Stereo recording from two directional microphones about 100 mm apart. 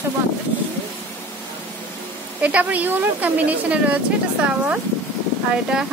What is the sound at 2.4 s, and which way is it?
Speech, 15° right (ahead or behind).